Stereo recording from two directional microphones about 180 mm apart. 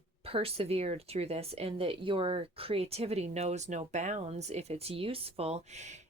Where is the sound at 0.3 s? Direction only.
30° right (ahead or behind).